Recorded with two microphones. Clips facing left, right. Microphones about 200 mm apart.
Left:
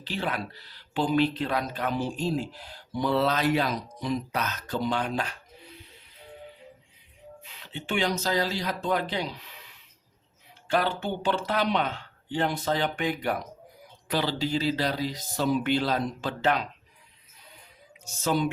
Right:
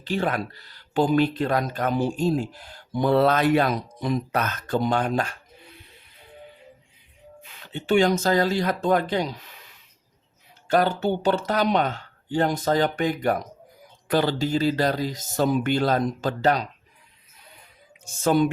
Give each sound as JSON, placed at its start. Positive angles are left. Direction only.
{"t": 0.0, "sound": "speech", "side_deg": -50}
{"t": 7.4, "sound": "speech", "side_deg": -50}
{"t": 10.7, "sound": "speech", "side_deg": -40}
{"t": 18.0, "sound": "speech", "side_deg": -50}